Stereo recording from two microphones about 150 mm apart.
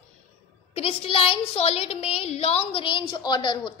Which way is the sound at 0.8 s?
40° left (ahead or behind).